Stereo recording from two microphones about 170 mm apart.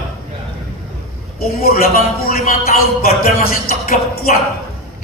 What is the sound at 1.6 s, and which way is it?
Speech, 60° left (ahead or behind).